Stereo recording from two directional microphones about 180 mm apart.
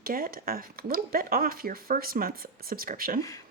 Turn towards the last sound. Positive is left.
turn(degrees=-50)  # may be behind; listen again after turning